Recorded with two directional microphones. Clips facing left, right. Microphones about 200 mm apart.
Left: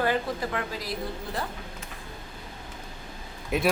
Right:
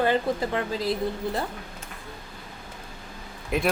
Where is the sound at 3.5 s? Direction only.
Centre (ahead or behind).